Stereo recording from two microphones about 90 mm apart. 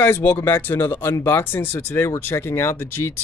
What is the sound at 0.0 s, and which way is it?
Speech, 25° left (ahead or behind).